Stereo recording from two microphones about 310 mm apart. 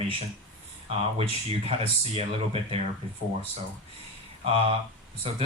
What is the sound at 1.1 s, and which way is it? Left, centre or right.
Speech, centre.